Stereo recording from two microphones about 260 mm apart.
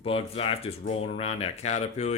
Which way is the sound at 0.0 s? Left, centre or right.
Left.